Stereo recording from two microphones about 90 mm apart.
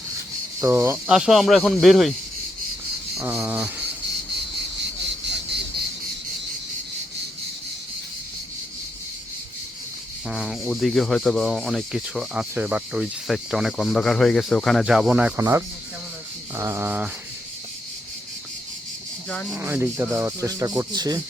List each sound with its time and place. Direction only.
0.6 s speech: 30° right (ahead or behind)
1.0 s speech: 5° right (ahead or behind)
3.2 s speech: 30° right (ahead or behind)
3.5 s cricket: 20° right (ahead or behind)
10.2 s speech: 5° right (ahead or behind)
14.8 s speech: 5° right (ahead or behind)
16.6 s speech: 30° right (ahead or behind)
19.5 s speech: 25° right (ahead or behind)
20.4 s speech: 40° right (ahead or behind)